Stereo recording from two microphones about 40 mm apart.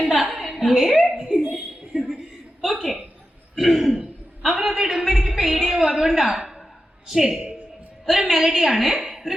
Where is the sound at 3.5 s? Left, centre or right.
Centre.